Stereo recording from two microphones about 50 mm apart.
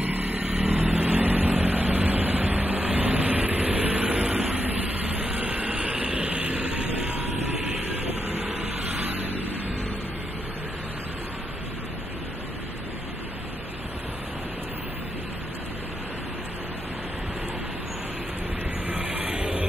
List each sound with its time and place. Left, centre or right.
0.0 s vehicle: right
8.8 s vehicle: right
19.2 s music: centre